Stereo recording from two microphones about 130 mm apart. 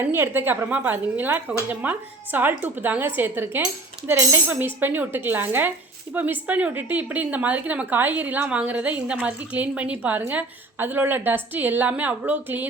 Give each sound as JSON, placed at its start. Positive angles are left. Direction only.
{"t": 0.0, "sound": "a woman's voice", "side_deg": -15}